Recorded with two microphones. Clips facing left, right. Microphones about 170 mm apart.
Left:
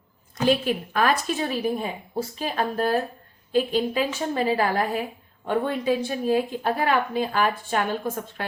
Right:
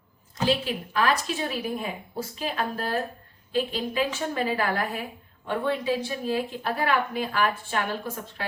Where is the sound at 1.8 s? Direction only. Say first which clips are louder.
Left 3 dB; 35° left (ahead or behind).